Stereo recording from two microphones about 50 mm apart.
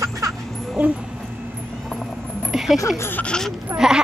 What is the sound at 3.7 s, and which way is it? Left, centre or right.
Speech, right.